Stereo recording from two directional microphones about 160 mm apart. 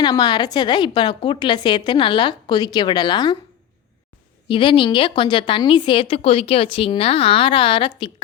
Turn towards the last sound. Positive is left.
turn(degrees=35)  # may be behind; listen again after turning